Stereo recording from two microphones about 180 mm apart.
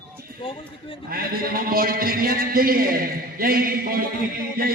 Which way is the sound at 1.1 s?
55° right (ahead or behind).